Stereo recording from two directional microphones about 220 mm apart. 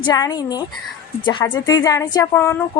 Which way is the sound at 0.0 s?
20° left (ahead or behind).